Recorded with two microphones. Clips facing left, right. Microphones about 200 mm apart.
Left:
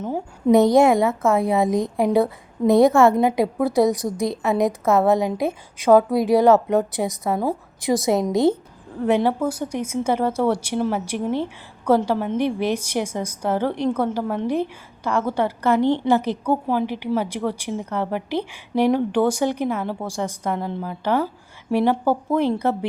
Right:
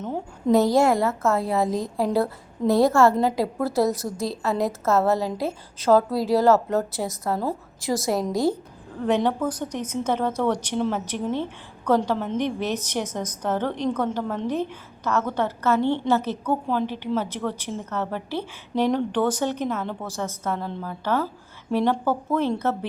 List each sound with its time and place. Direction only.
0.0 s a woman's voice: 5° left (ahead or behind)
0.5 s a woman's voice: 20° left (ahead or behind)
9.0 s speech: 10° left (ahead or behind)